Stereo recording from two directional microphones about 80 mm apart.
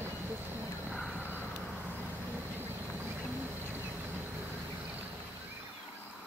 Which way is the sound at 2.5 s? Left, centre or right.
Right.